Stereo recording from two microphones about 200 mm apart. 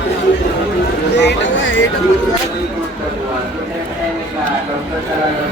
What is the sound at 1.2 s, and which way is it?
Speech, 65° left (ahead or behind).